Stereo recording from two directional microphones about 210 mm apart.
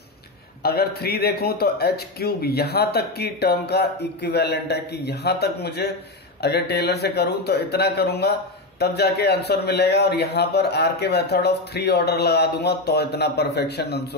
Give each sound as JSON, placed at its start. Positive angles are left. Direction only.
{"t": 0.6, "sound": "a man's voice", "side_deg": 50}